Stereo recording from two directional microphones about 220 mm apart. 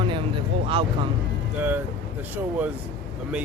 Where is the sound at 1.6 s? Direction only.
10° right (ahead or behind).